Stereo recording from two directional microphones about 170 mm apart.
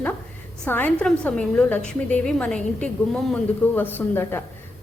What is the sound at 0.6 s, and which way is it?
A woman's voice, 10° left (ahead or behind).